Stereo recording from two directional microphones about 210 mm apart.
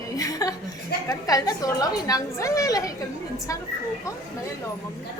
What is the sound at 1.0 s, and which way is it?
Speech, 15° left (ahead or behind).